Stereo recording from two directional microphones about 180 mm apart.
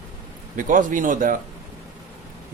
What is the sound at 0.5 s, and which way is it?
Speech, 50° right (ahead or behind).